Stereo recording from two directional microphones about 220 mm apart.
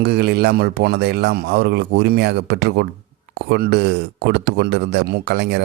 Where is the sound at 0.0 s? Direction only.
45° right (ahead or behind).